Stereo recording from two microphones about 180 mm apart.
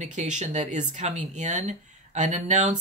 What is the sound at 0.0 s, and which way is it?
Speech, 40° right (ahead or behind).